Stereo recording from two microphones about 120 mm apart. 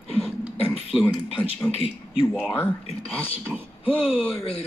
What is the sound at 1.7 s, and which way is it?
Speech, 50° left (ahead or behind).